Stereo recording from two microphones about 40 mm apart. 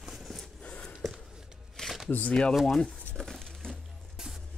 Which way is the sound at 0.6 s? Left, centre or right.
Left.